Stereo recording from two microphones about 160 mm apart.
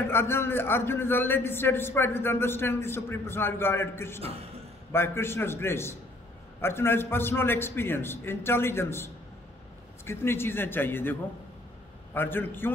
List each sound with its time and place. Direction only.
0.0 s a man's voice: 15° left (ahead or behind)
4.2 s speech: 40° right (ahead or behind)
4.9 s a man's voice: 15° left (ahead or behind)